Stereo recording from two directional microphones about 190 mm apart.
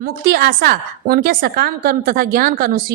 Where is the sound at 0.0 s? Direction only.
50° right (ahead or behind).